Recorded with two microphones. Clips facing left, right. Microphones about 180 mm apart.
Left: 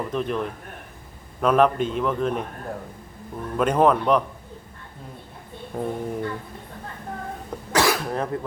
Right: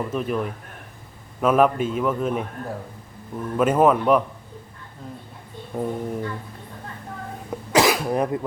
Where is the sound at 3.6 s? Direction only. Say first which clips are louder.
Right 1 dB; 5° right (ahead or behind).